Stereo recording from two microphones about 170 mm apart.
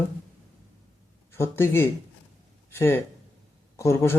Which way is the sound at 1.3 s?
15° left (ahead or behind).